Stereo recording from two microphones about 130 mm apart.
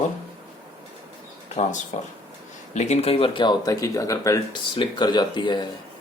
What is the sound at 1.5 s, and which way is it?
Speech, 65° left (ahead or behind).